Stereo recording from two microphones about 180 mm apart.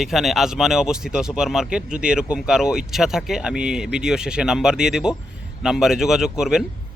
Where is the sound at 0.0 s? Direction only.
Centre (ahead or behind).